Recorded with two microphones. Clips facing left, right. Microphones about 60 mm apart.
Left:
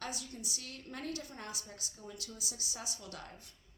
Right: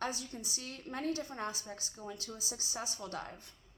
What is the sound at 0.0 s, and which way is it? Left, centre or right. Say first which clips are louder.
A woman's voice: right 4 dB; right.